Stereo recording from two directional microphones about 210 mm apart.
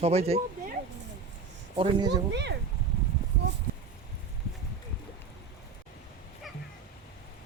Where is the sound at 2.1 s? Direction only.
55° right (ahead or behind).